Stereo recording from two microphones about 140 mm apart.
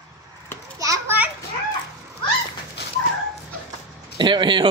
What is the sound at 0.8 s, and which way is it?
Children playing, 20° right (ahead or behind).